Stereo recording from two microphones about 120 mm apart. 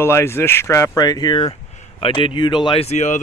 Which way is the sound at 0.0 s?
20° left (ahead or behind).